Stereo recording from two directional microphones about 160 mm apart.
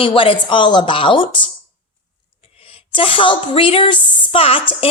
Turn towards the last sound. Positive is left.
turn(degrees=35)  # may be behind; listen again after turning